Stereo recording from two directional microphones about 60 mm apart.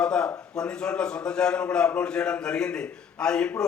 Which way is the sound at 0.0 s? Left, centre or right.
Centre.